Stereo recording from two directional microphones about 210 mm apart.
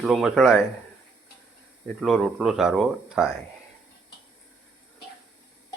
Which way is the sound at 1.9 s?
Centre (ahead or behind).